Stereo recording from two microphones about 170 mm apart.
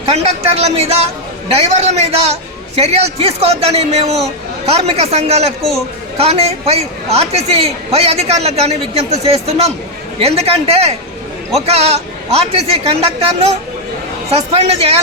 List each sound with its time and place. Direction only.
0.1 s a man's voice: 40° right (ahead or behind)